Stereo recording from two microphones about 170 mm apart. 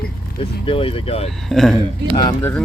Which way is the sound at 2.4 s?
15° left (ahead or behind).